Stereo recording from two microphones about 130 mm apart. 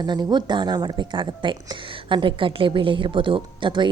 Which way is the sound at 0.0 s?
35° right (ahead or behind).